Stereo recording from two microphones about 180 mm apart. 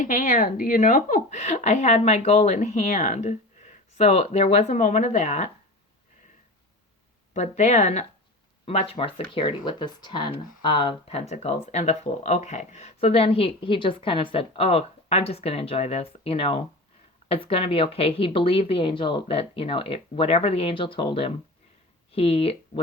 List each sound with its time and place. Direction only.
0.0 s speech: 45° left (ahead or behind)
7.3 s speech: 40° left (ahead or behind)